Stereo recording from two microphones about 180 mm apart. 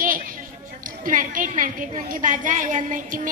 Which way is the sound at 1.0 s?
50° right (ahead or behind).